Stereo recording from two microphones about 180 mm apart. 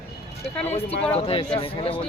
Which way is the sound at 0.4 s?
35° left (ahead or behind).